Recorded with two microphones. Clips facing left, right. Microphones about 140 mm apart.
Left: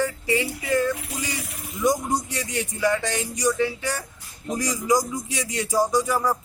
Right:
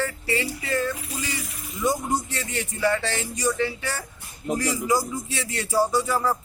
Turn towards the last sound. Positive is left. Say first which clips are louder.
# left 1 dB
turn(degrees=15)  # may be behind; listen again after turning